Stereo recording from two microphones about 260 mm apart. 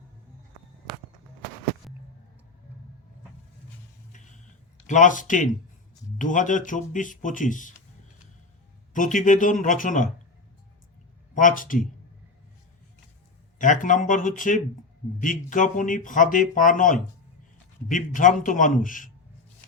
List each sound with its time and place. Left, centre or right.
1.8 s a sound: centre
4.9 s speech: left
8.9 s speech: left
11.3 s speech: left
13.6 s speech: left